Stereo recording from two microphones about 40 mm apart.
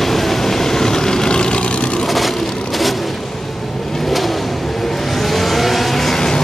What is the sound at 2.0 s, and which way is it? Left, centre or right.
Vehicle, centre.